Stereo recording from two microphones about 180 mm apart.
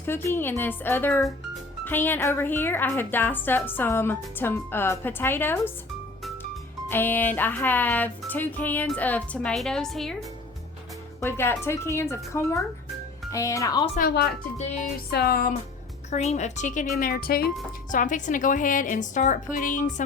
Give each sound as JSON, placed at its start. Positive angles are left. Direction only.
{"t": 0.0, "sound": "speech", "side_deg": 10}
{"t": 6.8, "sound": "speech", "side_deg": 10}
{"t": 11.2, "sound": "speech", "side_deg": 15}
{"t": 14.0, "sound": "speech", "side_deg": 60}
{"t": 14.6, "sound": "speech", "side_deg": 40}
{"t": 15.1, "sound": "speech", "side_deg": 60}
{"t": 16.0, "sound": "speech", "side_deg": 40}
{"t": 17.0, "sound": "speech", "side_deg": 55}
{"t": 17.9, "sound": "a woman's voice", "side_deg": 45}